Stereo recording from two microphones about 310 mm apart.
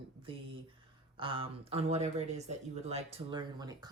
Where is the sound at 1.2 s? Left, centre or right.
Centre.